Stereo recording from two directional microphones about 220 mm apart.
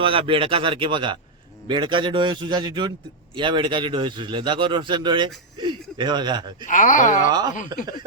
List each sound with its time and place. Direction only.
0.0 s a man's voice: 25° right (ahead or behind)
6.7 s speech: 35° left (ahead or behind)
7.3 s a man's voice: 20° right (ahead or behind)